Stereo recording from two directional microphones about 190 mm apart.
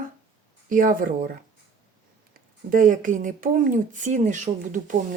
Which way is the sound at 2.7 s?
45° right (ahead or behind).